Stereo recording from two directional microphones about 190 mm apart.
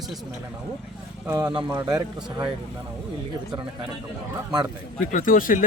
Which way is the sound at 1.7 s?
15° right (ahead or behind).